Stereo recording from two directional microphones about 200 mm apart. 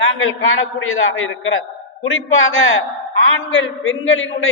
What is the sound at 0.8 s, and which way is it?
A woman's voice, 85° left.